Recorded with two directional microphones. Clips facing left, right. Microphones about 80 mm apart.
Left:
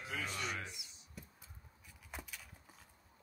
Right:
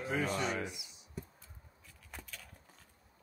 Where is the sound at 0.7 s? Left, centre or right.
Centre.